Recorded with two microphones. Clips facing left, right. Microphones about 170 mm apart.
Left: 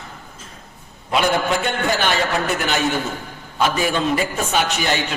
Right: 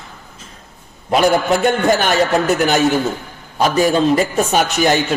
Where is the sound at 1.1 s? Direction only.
45° right (ahead or behind).